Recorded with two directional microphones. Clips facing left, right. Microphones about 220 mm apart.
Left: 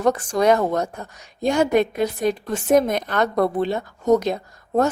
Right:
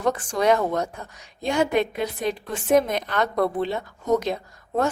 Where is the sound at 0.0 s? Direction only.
40° left (ahead or behind).